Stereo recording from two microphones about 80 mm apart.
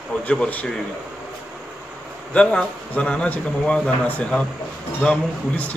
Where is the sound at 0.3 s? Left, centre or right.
Centre.